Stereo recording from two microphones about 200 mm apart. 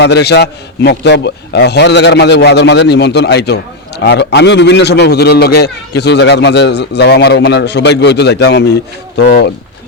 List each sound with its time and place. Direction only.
0.0 s a man's voice: 55° left (ahead or behind)